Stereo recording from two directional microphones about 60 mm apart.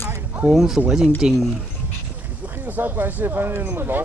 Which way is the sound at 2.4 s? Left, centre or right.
Right.